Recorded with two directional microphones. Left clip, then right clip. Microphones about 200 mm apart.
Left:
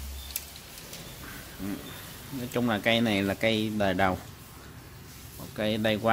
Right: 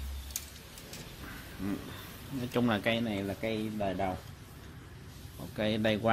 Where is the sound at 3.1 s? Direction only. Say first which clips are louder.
Left 8 dB; 25° left (ahead or behind).